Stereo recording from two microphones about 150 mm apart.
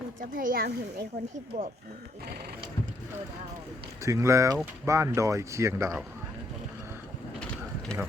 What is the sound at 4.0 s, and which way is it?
Speech, 20° right (ahead or behind).